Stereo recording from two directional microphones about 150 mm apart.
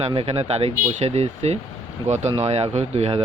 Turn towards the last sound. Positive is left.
turn(degrees=-45)  # may be behind; listen again after turning